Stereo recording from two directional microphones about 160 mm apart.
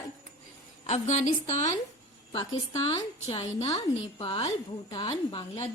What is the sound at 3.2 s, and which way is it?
A woman's voice, 40° left (ahead or behind).